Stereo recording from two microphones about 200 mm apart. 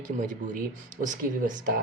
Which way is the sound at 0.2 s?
40° right (ahead or behind).